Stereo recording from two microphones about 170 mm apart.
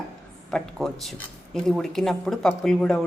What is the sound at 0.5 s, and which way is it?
A woman's voice, 5° left (ahead or behind).